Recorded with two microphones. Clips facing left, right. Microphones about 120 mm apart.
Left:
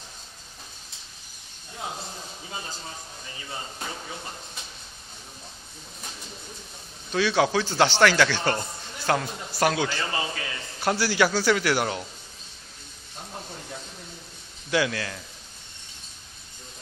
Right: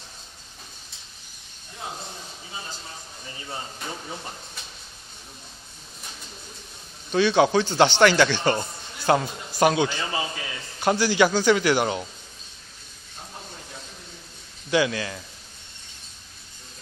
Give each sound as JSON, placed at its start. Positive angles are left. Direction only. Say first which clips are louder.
{"t": 7.1, "sound": "speech", "louder": "right 4 dB", "side_deg": 0}
{"t": 8.5, "sound": "a sound", "louder": "right 2 dB", "side_deg": -15}
{"t": 9.6, "sound": "a man's voice", "louder": "right 4 dB", "side_deg": -20}
{"t": 14.7, "sound": "speech", "louder": "right 3 dB", "side_deg": -5}